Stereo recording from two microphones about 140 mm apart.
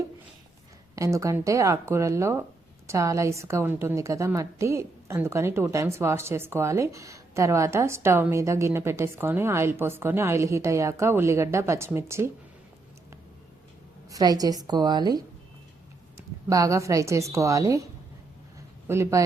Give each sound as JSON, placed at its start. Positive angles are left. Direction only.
{"t": 0.9, "sound": "a woman's voice", "side_deg": -20}
{"t": 14.1, "sound": "a woman's voice", "side_deg": -25}
{"t": 16.5, "sound": "a woman's voice", "side_deg": -25}
{"t": 18.9, "sound": "a woman's voice", "side_deg": -20}